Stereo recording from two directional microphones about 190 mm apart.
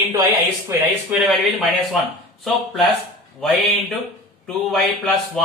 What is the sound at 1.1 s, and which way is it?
A man's voice, centre (ahead or behind).